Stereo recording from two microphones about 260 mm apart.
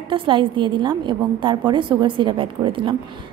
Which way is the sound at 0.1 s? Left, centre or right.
Centre.